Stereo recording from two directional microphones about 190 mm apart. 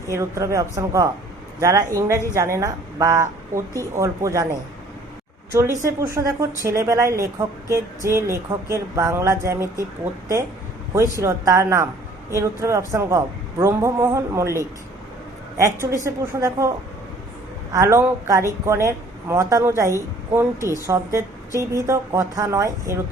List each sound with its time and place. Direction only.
0.1 s a woman's voice: 15° right (ahead or behind)
5.5 s a woman's voice: 15° right (ahead or behind)
10.9 s a woman's voice: 15° right (ahead or behind)